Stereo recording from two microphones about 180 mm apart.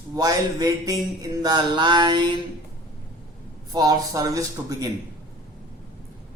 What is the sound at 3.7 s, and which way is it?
Speech, 20° right (ahead or behind).